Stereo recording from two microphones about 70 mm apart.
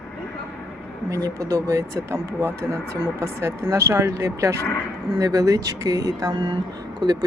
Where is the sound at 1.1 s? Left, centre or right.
Right.